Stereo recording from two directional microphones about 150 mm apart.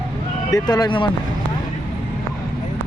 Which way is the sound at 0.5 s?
25° left (ahead or behind).